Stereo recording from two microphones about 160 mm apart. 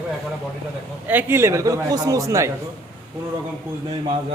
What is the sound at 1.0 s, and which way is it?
A man's voice, 15° right (ahead or behind).